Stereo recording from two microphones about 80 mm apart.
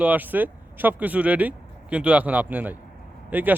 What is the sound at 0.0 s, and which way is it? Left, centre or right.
Speech, right.